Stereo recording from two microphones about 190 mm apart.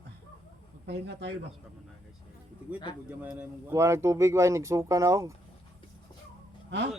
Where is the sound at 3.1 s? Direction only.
10° right (ahead or behind).